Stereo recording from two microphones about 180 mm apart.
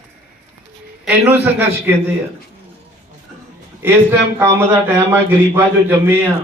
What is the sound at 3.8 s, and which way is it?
A man's voice, 10° right (ahead or behind).